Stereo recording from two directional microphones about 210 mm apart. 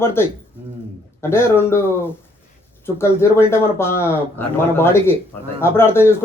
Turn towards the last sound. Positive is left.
turn(degrees=10)  # may be behind; listen again after turning